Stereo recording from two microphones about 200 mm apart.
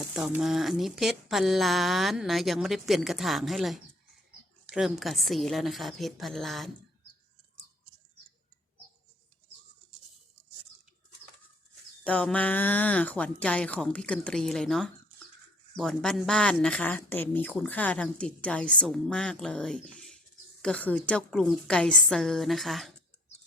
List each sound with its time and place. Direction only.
0.1 s speech: 5° right (ahead or behind)
12.0 s speech: 5° left (ahead or behind)